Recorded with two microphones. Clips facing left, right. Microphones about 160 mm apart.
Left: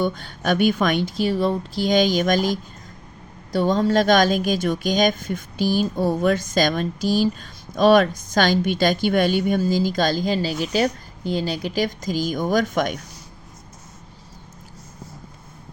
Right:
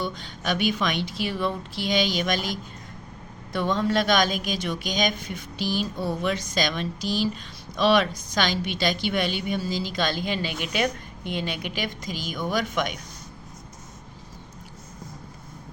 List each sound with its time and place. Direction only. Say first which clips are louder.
0.0 s a woman's voice: left 7 dB; 55° left (ahead or behind)
3.5 s a woman's voice: left 5 dB; 35° left (ahead or behind)